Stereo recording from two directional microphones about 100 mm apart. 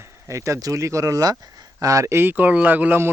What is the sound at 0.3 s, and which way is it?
Speech, 30° right (ahead or behind).